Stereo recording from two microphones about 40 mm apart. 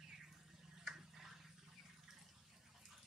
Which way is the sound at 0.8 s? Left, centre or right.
Centre.